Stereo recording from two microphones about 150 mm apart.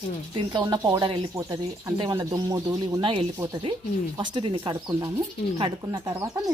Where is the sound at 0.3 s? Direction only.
30° right (ahead or behind).